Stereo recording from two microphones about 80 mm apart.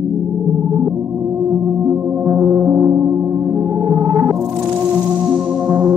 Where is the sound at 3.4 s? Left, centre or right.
Centre.